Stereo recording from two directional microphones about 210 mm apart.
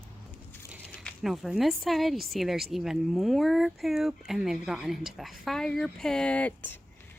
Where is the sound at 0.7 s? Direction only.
Centre (ahead or behind).